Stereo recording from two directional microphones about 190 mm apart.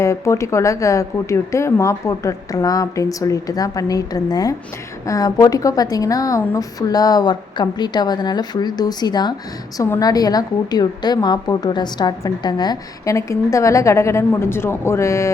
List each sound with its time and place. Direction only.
0.0 s a woman's voice: 15° left (ahead or behind)